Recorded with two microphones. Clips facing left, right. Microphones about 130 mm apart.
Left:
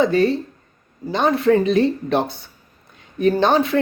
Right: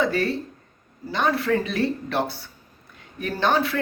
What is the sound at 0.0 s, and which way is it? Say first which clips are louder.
A woman's voice: left 6 dB; 20° left (ahead or behind).